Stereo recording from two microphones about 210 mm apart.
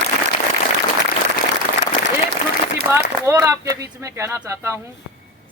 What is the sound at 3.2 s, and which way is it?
Speech, 15° right (ahead or behind).